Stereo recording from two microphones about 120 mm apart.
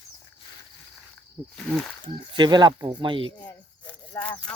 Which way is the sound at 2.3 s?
40° right (ahead or behind).